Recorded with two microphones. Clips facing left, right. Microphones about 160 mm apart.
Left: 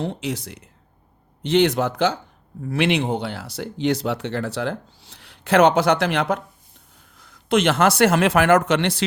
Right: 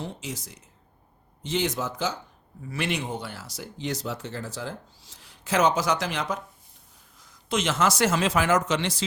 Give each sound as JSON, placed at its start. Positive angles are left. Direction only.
{"t": 0.0, "sound": "speech", "side_deg": 65}